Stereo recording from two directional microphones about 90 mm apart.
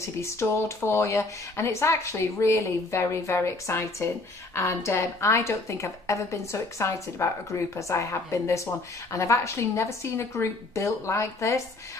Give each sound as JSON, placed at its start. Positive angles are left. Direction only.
{"t": 0.0, "sound": "speech", "side_deg": 30}